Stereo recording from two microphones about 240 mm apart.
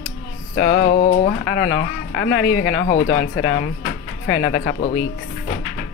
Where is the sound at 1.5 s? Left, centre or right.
Left.